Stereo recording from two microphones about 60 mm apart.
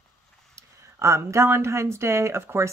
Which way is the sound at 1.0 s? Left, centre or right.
Right.